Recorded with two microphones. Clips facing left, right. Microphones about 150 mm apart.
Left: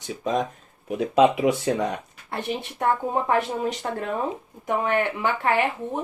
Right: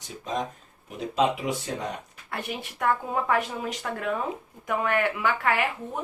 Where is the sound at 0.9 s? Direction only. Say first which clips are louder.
Left 6 dB; 70° left (ahead or behind).